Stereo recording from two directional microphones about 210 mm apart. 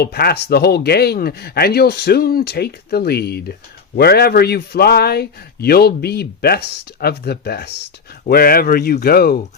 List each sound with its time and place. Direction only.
0.0 s a man's voice: 50° left (ahead or behind)